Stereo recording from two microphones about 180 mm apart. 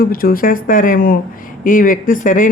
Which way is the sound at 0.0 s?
55° left (ahead or behind).